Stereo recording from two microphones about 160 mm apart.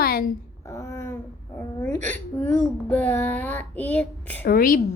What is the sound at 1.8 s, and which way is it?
Hiccup, 10° left (ahead or behind).